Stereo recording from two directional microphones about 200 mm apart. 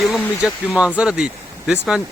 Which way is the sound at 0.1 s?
Centre (ahead or behind).